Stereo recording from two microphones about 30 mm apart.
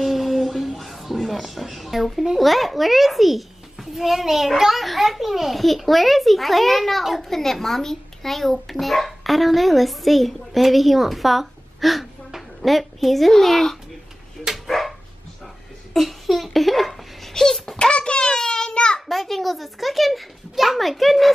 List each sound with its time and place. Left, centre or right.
0.0 s music: centre
2.3 s a child's voice: centre
12.3 s a sound: centre
13.4 s a child's voice: centre
14.7 s dog: centre
15.9 s speech: centre
17.3 s dog: centre
17.7 s a sound: left
18.3 s a sound: left
18.9 s a child's voice: centre